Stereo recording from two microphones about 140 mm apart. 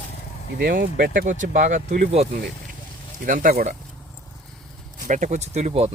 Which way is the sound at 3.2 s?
70° right (ahead or behind).